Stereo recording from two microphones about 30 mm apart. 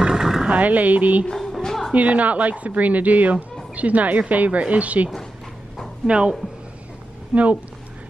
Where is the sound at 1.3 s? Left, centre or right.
Centre.